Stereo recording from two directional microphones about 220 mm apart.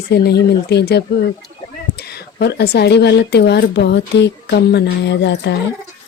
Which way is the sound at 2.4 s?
50° left (ahead or behind).